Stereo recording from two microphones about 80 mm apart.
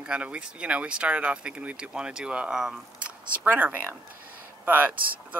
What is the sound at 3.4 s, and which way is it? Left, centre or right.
Speech, right.